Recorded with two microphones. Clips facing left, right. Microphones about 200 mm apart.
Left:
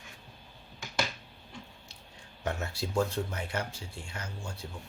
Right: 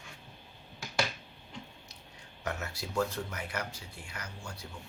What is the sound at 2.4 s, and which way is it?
Speech, 30° left (ahead or behind).